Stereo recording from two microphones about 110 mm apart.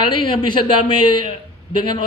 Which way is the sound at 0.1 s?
45° left (ahead or behind).